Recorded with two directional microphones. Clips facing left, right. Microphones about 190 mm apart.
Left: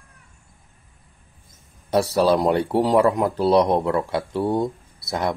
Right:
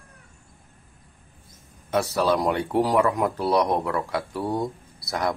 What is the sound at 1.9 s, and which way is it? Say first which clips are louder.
Speech: left 4 dB; 35° left (ahead or behind).